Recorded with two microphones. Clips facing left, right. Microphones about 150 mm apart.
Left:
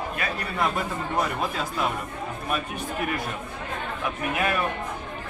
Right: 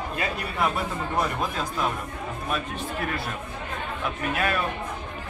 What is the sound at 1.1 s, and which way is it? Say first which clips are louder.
Speech: even; centre (ahead or behind).